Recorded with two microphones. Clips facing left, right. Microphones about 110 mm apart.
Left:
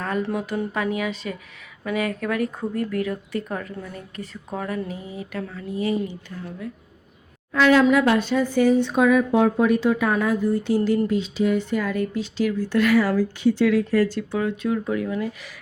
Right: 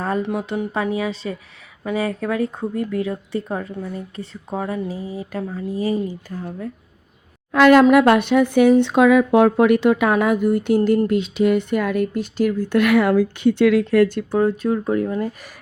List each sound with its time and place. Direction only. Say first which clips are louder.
0.2 s a woman's voice: right 2 dB; 20° right (ahead or behind); by 6.7 s 40° right (ahead or behind)
7.5 s speech: right 5 dB; 60° right (ahead or behind)
14.3 s a woman's voice: right 6 dB; 40° right (ahead or behind)